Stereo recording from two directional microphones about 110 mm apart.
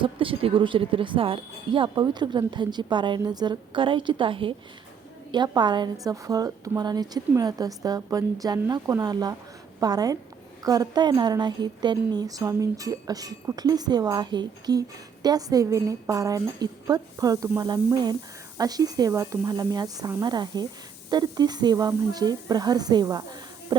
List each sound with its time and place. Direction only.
0.0 s speech: 50° right (ahead or behind)
5.3 s a woman's voice: 40° right (ahead or behind)